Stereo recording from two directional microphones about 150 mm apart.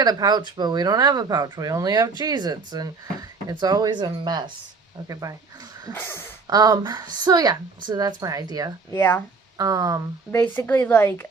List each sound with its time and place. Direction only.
0.0 s speech: 25° right (ahead or behind)
5.9 s speech: 15° left (ahead or behind)
6.5 s speech: 25° right (ahead or behind)
8.9 s speech: 15° left (ahead or behind)
9.6 s speech: 25° right (ahead or behind)
10.3 s speech: centre (ahead or behind)
10.7 s speech: 10° left (ahead or behind)